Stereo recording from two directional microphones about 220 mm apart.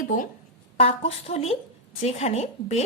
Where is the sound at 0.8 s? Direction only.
25° left (ahead or behind).